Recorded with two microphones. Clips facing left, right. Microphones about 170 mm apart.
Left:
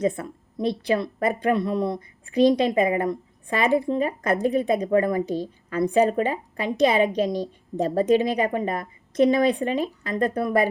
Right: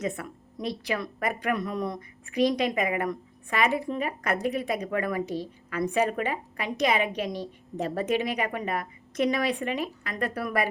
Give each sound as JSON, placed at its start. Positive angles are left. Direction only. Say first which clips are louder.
{"t": 0.0, "sound": "speech", "louder": "left 7 dB", "side_deg": 30}